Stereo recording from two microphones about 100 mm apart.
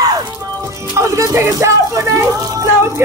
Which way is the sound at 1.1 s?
30° right (ahead or behind).